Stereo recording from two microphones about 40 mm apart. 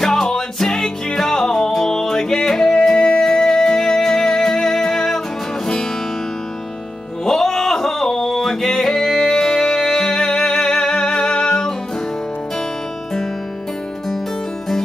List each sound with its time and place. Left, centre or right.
0.0 s music: centre
7.2 s music: centre